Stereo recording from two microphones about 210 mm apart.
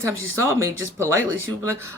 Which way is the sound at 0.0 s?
15° right (ahead or behind).